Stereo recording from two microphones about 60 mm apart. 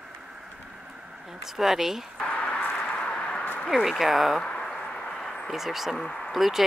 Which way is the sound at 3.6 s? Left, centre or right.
Centre.